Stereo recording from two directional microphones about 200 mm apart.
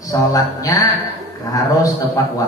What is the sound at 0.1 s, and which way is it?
A man's voice, 15° left (ahead or behind).